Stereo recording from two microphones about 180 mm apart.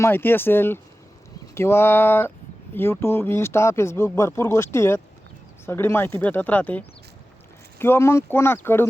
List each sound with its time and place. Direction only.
0.0 s speech: 10° left (ahead or behind)